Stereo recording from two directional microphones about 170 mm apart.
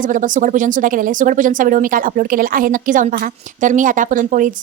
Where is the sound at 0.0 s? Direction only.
50° right (ahead or behind).